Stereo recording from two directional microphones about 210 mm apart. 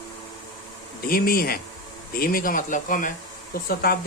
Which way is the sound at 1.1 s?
45° left (ahead or behind).